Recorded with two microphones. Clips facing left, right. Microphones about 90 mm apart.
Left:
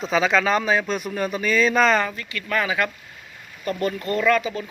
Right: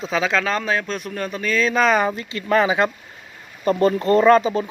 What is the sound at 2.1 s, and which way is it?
Speech, 25° right (ahead or behind).